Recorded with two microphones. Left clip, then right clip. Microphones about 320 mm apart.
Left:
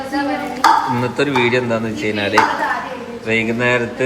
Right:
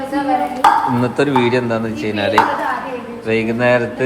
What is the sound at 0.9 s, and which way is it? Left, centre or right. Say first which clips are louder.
A man's voice: right 1 dB; centre.